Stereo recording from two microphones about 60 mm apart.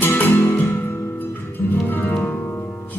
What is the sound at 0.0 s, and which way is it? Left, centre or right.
Music, left.